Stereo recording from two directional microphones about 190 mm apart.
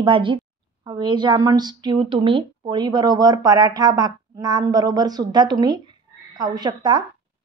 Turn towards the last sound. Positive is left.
turn(degrees=-20)  # may be behind; listen again after turning